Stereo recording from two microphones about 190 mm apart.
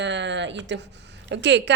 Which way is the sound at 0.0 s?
70° right (ahead or behind).